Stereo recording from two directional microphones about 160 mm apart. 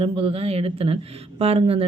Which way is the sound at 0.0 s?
35° right (ahead or behind).